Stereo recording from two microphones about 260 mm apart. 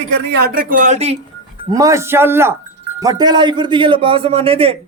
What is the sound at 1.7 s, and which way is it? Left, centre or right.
A man's voice, centre.